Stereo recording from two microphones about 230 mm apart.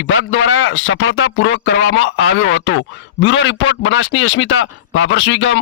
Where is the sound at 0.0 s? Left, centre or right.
Left.